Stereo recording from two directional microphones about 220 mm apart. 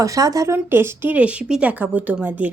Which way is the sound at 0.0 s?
15° right (ahead or behind).